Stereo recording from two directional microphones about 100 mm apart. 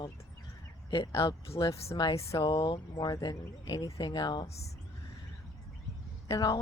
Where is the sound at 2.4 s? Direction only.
60° left (ahead or behind).